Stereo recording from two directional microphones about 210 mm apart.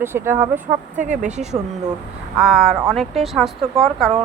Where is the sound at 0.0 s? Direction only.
10° right (ahead or behind).